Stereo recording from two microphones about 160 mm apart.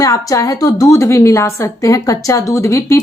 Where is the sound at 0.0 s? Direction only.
20° left (ahead or behind).